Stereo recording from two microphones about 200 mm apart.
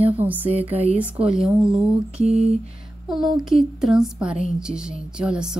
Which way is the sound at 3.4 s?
Centre (ahead or behind).